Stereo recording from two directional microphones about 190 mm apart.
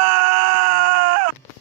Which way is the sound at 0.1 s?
50° right (ahead or behind).